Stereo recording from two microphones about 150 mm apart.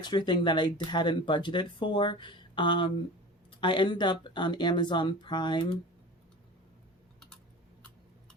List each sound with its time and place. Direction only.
0.0 s speech: 30° left (ahead or behind)